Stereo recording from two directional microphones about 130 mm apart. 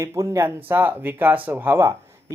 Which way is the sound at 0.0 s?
20° right (ahead or behind).